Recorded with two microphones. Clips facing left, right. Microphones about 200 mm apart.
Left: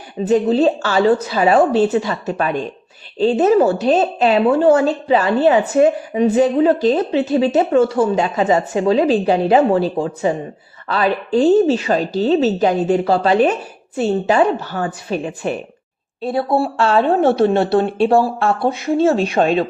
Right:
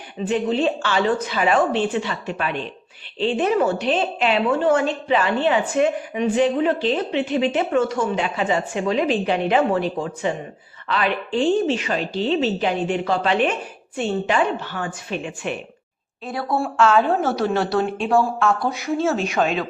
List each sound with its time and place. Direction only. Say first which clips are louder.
0.3 s a woman's voice: left 6 dB; 40° left (ahead or behind)
16.2 s speech: left 7 dB; 25° left (ahead or behind)